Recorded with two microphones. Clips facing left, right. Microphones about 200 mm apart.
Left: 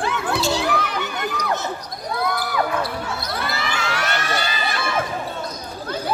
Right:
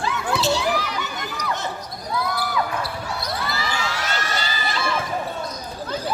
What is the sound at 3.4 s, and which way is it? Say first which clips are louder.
Children shouting: left 1 dB; 65° left (ahead or behind).